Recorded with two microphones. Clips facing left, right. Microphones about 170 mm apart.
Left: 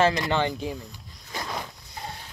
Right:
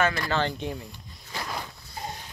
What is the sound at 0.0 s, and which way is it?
Speech, 20° left (ahead or behind).